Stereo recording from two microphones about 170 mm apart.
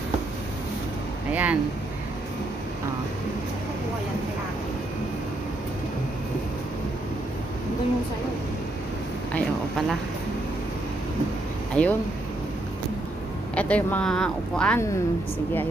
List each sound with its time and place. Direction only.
1.3 s speech: 10° right (ahead or behind)
9.3 s a sound: centre (ahead or behind)
11.7 s speech: 10° left (ahead or behind)
13.6 s speech: 10° left (ahead or behind)